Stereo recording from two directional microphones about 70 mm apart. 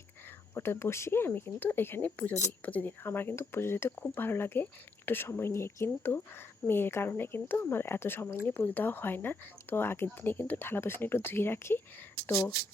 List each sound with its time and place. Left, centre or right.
0.5 s speech: left
8.4 s speech: left